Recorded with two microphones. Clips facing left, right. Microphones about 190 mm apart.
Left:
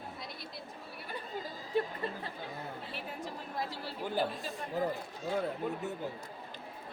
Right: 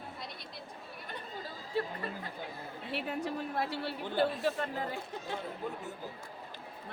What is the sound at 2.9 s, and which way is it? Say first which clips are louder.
A woman's voice: right 6 dB; 70° right (ahead or behind).